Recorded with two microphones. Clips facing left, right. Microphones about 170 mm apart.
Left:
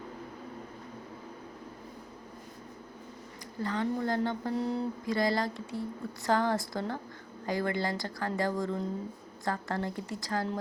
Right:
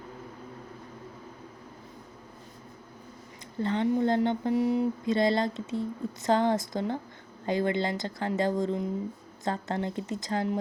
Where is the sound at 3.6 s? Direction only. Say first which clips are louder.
Right 5 dB; 25° right (ahead or behind).